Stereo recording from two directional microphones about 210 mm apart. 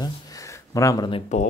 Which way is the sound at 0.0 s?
15° left (ahead or behind).